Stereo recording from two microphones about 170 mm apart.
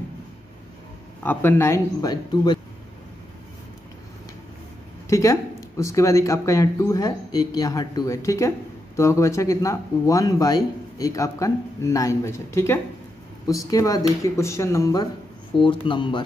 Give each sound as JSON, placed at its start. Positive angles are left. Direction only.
{"t": 1.2, "sound": "speech", "side_deg": 10}
{"t": 5.1, "sound": "speech", "side_deg": 15}
{"t": 15.6, "sound": "speech", "side_deg": 30}